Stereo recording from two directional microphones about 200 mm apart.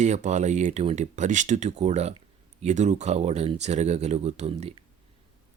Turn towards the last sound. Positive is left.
turn(degrees=-30)  # may be behind; listen again after turning